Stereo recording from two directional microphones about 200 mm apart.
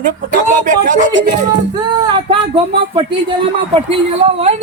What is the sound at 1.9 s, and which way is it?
Speech, 25° right (ahead or behind).